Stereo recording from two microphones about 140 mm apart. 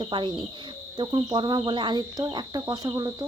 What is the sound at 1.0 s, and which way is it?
Cricket, 35° right (ahead or behind).